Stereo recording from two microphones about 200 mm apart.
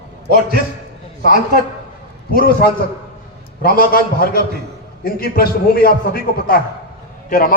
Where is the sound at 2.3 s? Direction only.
45° left (ahead or behind).